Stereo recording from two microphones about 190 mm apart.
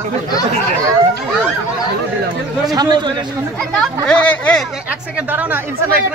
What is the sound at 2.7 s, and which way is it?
Speech, 20° right (ahead or behind).